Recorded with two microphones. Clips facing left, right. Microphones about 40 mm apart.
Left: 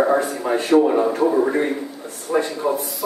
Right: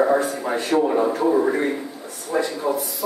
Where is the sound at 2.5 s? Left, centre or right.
Centre.